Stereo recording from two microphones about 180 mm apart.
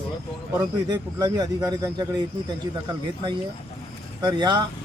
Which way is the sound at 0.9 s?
20° right (ahead or behind).